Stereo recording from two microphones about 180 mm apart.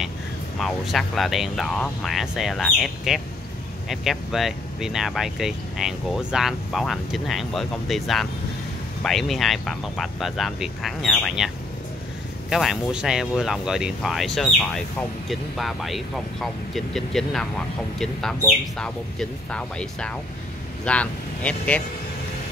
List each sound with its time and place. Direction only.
0.6 s speech: centre (ahead or behind)